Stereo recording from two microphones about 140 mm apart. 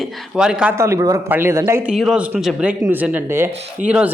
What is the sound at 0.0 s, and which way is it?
Speech, 5° right (ahead or behind).